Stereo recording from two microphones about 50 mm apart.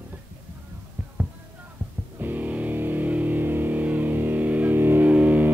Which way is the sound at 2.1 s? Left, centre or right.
Right.